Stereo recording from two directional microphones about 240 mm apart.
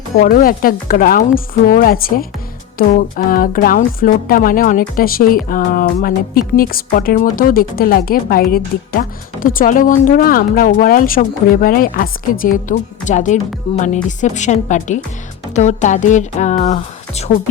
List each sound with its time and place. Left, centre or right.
0.2 s speech: left